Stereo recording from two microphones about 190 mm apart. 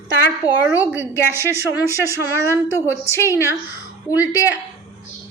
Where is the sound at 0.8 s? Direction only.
10° right (ahead or behind).